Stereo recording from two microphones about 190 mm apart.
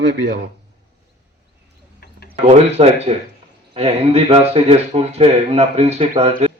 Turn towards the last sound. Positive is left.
turn(degrees=-35)  # may be behind; listen again after turning